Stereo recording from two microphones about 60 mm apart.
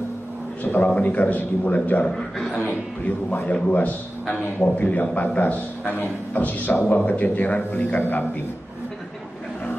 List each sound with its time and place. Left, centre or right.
0.7 s a man's voice: left
2.0 s a man's voice: centre
2.6 s a man's voice: left